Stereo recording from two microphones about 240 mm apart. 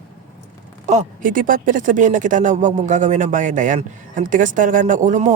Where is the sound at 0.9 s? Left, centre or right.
Right.